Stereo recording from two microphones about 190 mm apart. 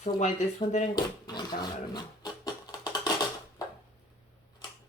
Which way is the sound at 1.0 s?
20° left (ahead or behind).